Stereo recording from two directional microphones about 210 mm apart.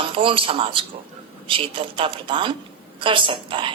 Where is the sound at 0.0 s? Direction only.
25° right (ahead or behind).